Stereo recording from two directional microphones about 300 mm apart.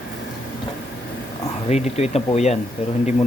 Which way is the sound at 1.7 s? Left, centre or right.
Left.